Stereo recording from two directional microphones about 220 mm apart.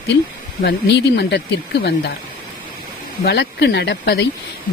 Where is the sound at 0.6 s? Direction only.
50° left (ahead or behind).